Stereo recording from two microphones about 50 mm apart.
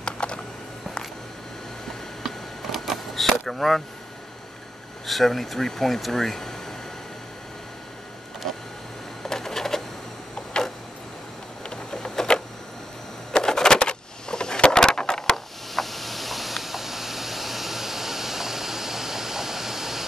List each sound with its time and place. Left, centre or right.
0.0 s typing: left
2.2 s vehicle: centre
5.0 s speech: centre
9.2 s printer: centre
11.7 s a sound: centre
15.3 s a sound: centre